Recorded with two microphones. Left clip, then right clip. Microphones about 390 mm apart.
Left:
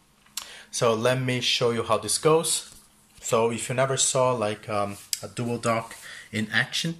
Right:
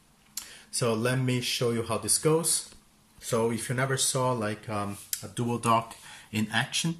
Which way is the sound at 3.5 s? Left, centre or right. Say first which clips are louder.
Left 5 dB; centre.